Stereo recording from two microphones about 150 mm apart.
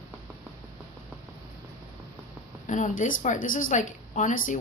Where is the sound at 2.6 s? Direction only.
55° left (ahead or behind).